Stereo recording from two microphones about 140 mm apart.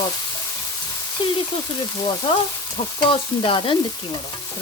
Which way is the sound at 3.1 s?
40° left (ahead or behind).